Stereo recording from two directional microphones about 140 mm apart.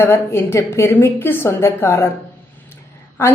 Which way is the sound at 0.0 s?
15° left (ahead or behind).